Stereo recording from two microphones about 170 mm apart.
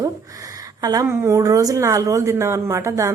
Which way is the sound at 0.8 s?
25° right (ahead or behind).